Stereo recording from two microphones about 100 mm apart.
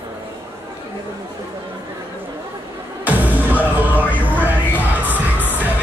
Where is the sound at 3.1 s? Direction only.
15° right (ahead or behind).